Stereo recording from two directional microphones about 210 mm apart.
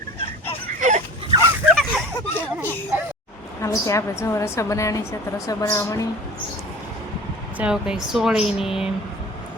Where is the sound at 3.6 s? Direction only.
15° left (ahead or behind).